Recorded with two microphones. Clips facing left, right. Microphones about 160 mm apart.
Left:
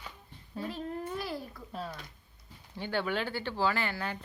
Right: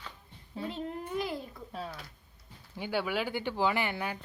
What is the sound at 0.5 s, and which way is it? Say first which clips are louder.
Babbling: even; 20° right (ahead or behind).